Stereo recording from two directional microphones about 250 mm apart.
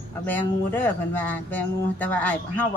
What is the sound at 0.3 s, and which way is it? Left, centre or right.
Speech, centre.